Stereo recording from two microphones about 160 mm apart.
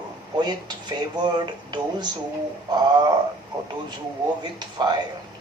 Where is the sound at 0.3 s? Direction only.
25° right (ahead or behind).